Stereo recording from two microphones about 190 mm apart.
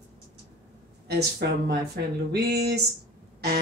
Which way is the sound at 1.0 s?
60° right (ahead or behind).